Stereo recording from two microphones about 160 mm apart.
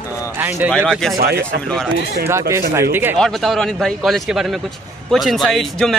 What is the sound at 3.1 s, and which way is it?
Speech, centre (ahead or behind).